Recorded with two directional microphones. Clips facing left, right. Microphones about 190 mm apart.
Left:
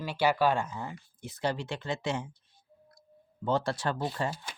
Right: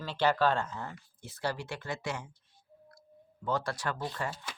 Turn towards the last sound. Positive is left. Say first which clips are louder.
# left 4 dB
turn(degrees=25)  # may be behind; listen again after turning